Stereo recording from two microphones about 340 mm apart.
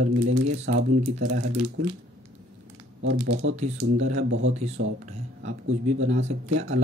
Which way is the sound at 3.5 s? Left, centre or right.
Right.